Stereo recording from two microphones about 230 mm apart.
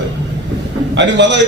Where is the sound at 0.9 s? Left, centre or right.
Right.